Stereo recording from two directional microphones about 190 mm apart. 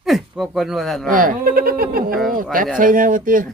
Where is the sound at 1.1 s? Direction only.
45° right (ahead or behind).